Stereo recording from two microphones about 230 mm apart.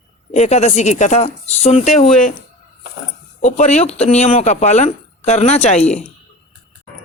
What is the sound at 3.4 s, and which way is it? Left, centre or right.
Speech, left.